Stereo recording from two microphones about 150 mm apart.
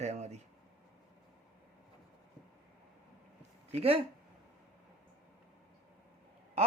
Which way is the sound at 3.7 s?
40° right (ahead or behind).